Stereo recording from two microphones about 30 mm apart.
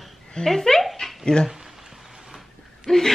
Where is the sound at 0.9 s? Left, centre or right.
Centre.